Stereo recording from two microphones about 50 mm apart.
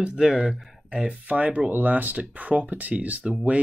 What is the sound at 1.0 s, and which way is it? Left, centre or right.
Speech, right.